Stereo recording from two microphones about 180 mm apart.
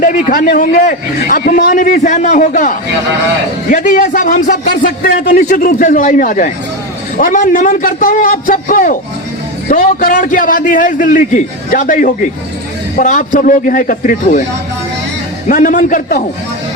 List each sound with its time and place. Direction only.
0.0 s a man's voice: 45° left (ahead or behind)
15.4 s a man's voice: 45° left (ahead or behind)